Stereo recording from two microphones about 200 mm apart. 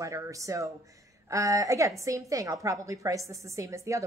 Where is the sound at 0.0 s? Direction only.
15° right (ahead or behind).